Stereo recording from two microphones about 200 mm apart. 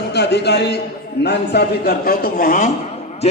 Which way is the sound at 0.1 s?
55° left (ahead or behind).